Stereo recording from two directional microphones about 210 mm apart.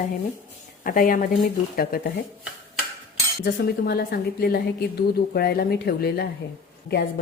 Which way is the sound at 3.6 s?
45° left (ahead or behind).